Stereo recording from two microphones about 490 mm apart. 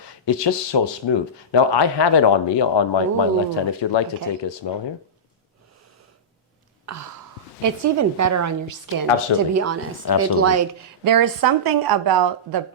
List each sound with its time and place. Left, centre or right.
0.3 s speech: left
6.9 s a woman's voice: right